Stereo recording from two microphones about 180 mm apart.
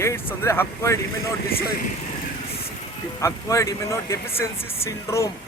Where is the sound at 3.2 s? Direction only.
15° left (ahead or behind).